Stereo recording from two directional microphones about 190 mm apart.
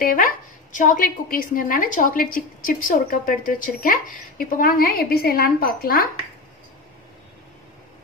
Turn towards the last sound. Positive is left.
turn(degrees=50)  # may be behind; listen again after turning